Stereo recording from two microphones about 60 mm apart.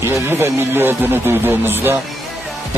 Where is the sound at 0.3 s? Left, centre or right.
Right.